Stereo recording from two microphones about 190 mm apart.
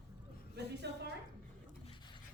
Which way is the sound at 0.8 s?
65° right (ahead or behind).